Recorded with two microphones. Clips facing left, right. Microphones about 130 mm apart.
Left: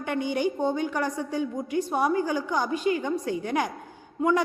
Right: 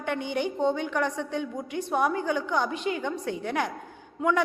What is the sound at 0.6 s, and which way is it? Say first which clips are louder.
A woman's voice: even; 5° left (ahead or behind).